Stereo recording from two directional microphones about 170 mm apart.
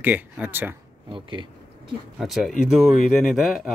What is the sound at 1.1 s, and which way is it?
Speech, 30° right (ahead or behind).